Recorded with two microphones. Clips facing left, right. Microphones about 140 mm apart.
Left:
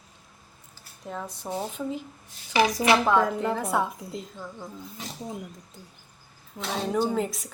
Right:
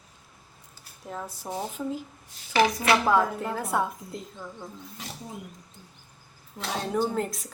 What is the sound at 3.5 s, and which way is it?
Speech, centre (ahead or behind).